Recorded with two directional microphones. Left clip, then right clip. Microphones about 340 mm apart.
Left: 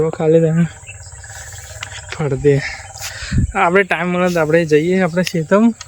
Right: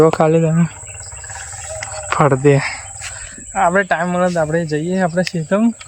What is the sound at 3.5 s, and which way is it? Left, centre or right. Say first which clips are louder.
Speech: even; centre.